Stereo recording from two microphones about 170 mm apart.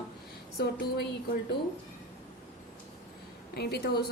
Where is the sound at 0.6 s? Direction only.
70° left (ahead or behind).